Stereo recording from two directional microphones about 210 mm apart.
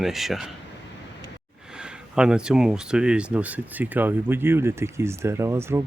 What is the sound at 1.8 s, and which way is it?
Speech, 5° right (ahead or behind).